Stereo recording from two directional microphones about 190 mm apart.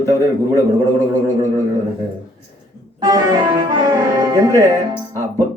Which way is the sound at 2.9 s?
20° right (ahead or behind).